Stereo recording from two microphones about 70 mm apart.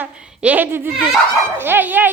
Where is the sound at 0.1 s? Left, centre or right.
Centre.